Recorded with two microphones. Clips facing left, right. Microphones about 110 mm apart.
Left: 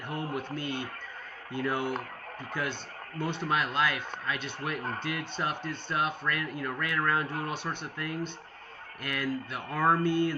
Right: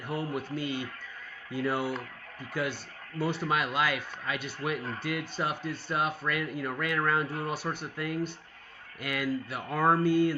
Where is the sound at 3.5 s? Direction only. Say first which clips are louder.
Left 2 dB; 10° right (ahead or behind).